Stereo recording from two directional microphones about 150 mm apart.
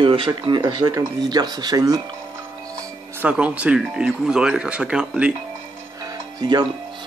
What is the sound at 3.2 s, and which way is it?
Speech, 10° right (ahead or behind).